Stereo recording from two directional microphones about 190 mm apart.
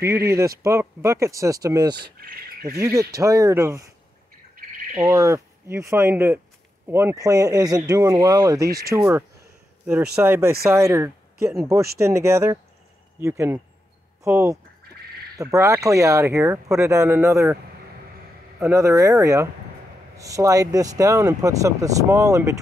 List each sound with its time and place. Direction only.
0.7 s speech: 15° right (ahead or behind)
2.1 s speech: 55° right (ahead or behind)
2.8 s speech: 15° right (ahead or behind)
4.9 s speech: 10° right (ahead or behind)
18.6 s speech: 15° right (ahead or behind)